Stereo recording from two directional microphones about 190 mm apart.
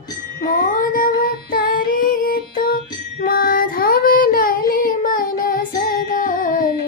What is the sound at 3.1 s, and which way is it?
Child singing, 50° left (ahead or behind).